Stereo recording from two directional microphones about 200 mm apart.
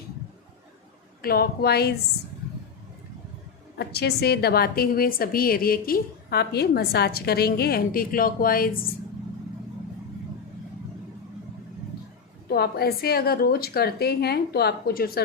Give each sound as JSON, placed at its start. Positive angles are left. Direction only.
{"t": 1.2, "sound": "a woman's voice", "side_deg": 50}
{"t": 3.8, "sound": "a woman's voice", "side_deg": 55}
{"t": 12.5, "sound": "a woman's voice", "side_deg": 50}